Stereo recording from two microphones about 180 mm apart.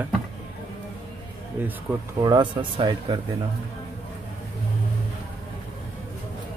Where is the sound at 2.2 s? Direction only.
25° right (ahead or behind).